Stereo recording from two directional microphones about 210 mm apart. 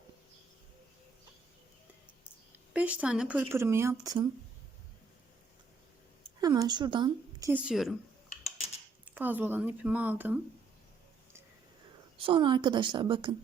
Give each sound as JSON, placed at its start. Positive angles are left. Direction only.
{"t": 2.7, "sound": "a woman's voice", "side_deg": -5}
{"t": 6.4, "sound": "a woman's voice", "side_deg": -20}
{"t": 7.6, "sound": "speech", "side_deg": 0}
{"t": 9.0, "sound": "a woman's voice", "side_deg": -10}
{"t": 12.1, "sound": "a woman's voice", "side_deg": -25}